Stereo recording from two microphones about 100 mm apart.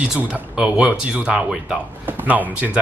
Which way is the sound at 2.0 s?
20° right (ahead or behind).